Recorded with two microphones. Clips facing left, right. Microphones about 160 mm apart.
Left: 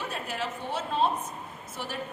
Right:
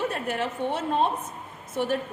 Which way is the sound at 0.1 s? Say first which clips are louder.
Right 5 dB; 55° right (ahead or behind).